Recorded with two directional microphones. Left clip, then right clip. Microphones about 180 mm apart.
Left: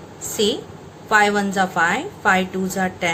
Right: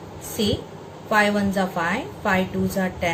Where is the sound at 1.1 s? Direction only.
60° left (ahead or behind).